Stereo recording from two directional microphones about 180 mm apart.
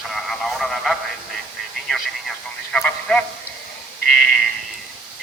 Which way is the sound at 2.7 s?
5° left (ahead or behind).